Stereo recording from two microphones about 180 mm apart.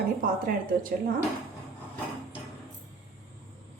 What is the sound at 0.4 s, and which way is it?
Speech, 50° right (ahead or behind).